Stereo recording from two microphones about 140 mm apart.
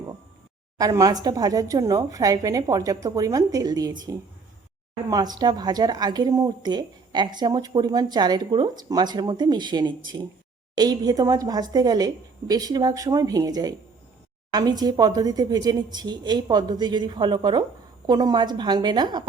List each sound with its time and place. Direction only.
0.8 s a woman's voice: 25° right (ahead or behind)